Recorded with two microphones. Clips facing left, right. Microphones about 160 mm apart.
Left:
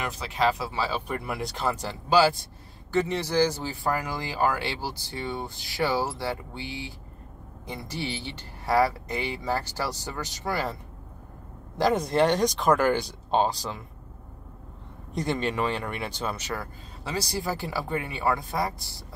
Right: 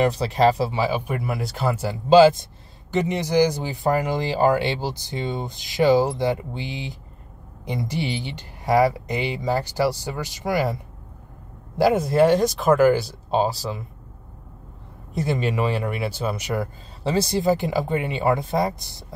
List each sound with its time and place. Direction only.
0.0 s speech: 35° right (ahead or behind)
0.7 s speech: 15° right (ahead or behind)
2.0 s speech: 20° right (ahead or behind)
11.8 s speech: 5° right (ahead or behind)
15.1 s speech: 10° right (ahead or behind)
17.0 s speech: 25° right (ahead or behind)